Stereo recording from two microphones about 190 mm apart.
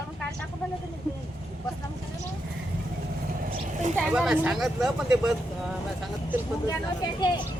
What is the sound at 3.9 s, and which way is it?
Speech, 5° right (ahead or behind).